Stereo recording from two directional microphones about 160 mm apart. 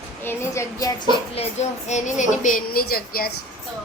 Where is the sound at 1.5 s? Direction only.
45° left (ahead or behind); by 3.3 s 70° left (ahead or behind).